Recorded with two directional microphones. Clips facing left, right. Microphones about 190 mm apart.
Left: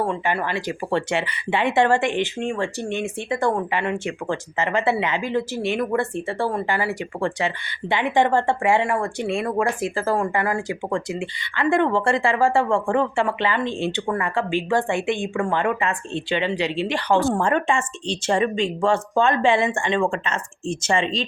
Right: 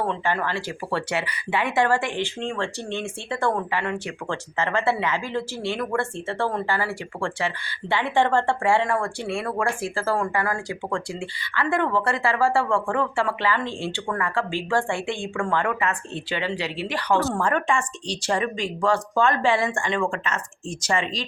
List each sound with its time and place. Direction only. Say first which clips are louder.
0.0 s speech: left 2 dB; 10° left (ahead or behind)